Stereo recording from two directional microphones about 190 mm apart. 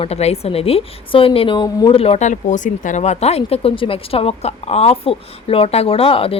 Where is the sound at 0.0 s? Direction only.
35° left (ahead or behind).